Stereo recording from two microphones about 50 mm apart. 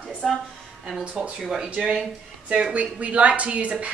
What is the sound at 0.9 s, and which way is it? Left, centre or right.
Speech, right.